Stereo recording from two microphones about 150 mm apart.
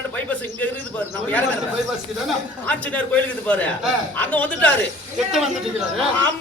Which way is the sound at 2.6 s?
10° left (ahead or behind).